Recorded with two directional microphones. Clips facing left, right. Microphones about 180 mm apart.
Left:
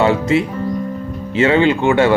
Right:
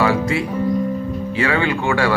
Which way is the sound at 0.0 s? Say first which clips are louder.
Left 4 dB; 25° left (ahead or behind).